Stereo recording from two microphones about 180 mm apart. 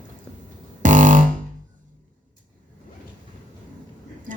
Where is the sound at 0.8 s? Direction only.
45° right (ahead or behind).